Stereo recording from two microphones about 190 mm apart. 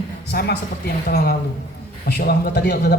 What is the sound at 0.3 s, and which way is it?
A man's voice, 60° left (ahead or behind).